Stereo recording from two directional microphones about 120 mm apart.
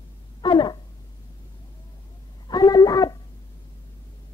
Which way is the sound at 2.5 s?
30° left (ahead or behind).